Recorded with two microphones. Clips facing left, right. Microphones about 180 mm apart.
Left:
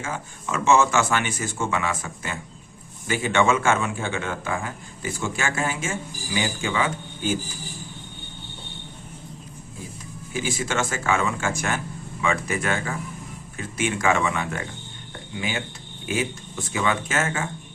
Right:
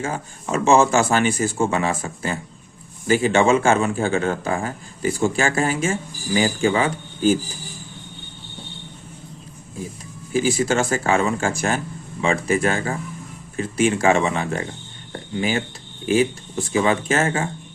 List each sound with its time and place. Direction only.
0.0 s speech: 35° right (ahead or behind)
10.3 s speech: 35° right (ahead or behind)